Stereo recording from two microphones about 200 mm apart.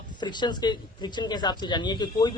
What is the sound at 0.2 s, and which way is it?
Speech, 20° left (ahead or behind).